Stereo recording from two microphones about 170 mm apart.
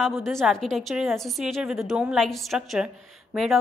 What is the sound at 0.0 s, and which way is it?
A woman's voice, centre (ahead or behind).